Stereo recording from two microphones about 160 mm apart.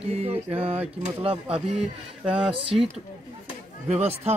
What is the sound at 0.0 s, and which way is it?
Speech, 40° right (ahead or behind).